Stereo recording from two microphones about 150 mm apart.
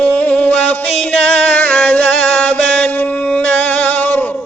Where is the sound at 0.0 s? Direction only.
10° left (ahead or behind).